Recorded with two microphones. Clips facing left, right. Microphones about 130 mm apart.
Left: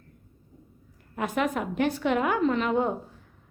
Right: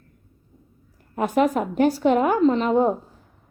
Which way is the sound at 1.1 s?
35° right (ahead or behind).